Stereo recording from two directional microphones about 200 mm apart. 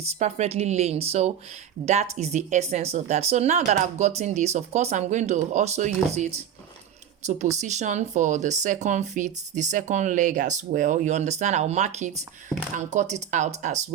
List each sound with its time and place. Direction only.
0.0 s speech: 35° right (ahead or behind)
7.5 s speech: 35° right (ahead or behind)